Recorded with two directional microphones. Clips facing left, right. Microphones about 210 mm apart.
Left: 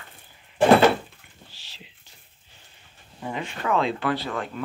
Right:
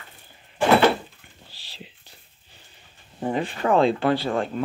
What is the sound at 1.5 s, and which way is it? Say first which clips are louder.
Whispering: right 3 dB; 35° right (ahead or behind).